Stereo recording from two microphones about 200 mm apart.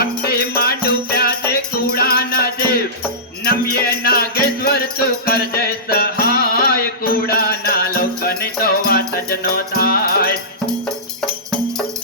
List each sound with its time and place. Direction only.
0.0 s music: 50° left (ahead or behind)
10.8 s music: centre (ahead or behind)